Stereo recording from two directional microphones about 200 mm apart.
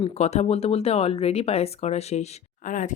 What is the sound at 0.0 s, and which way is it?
Speech, 30° left (ahead or behind).